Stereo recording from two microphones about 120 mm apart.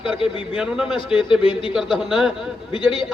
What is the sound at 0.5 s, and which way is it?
Speech, 5° right (ahead or behind).